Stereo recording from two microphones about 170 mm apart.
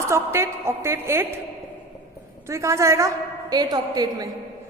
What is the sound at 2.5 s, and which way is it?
A woman's voice, 15° right (ahead or behind).